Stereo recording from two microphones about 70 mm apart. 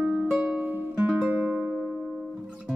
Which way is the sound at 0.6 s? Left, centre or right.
Right.